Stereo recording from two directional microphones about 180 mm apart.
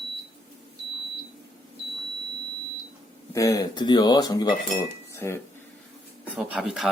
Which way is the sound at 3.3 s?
20° left (ahead or behind).